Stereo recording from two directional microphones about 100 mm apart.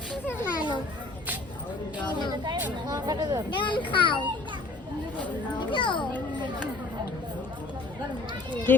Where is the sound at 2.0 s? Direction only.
50° left (ahead or behind).